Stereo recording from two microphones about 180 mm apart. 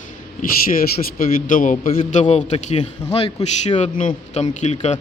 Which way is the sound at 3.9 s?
45° left (ahead or behind).